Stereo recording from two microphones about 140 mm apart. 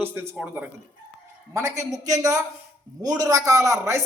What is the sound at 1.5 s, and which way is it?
A woman's voice, 20° right (ahead or behind).